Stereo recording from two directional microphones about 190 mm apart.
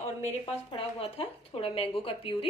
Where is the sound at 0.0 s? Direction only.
35° left (ahead or behind).